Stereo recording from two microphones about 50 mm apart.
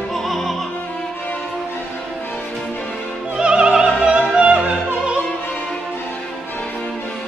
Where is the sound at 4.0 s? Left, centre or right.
Centre.